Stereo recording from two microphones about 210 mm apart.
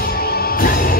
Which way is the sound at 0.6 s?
45° left (ahead or behind).